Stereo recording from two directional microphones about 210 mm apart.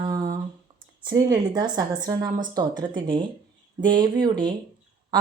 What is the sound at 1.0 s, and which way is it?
A woman's voice, 20° right (ahead or behind).